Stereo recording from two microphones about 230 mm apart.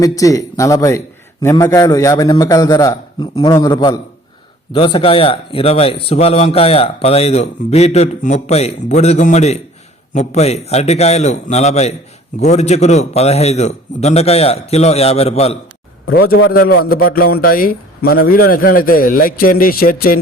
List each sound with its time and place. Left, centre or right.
0.0 s a man's voice: centre
16.1 s a man's voice: left